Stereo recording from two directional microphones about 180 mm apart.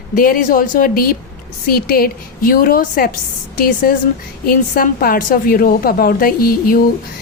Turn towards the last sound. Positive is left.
turn(degrees=55)  # may be behind; listen again after turning